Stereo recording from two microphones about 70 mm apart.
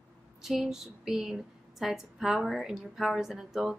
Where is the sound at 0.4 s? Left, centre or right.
Centre.